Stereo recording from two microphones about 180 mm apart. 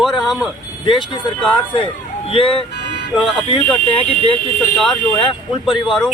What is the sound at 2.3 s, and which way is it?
Speech, 30° left (ahead or behind).